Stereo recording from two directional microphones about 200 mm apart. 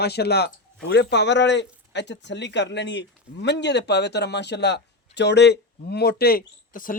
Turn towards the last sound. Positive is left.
turn(degrees=45)  # may be behind; listen again after turning